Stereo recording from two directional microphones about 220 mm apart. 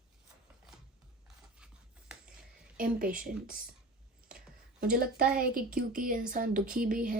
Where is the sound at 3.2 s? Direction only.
40° right (ahead or behind).